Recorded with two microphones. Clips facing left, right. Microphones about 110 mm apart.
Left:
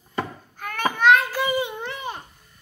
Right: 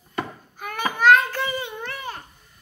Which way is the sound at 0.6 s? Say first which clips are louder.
Even; 10° right (ahead or behind).